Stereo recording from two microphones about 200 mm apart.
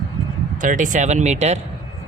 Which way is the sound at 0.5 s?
40° right (ahead or behind).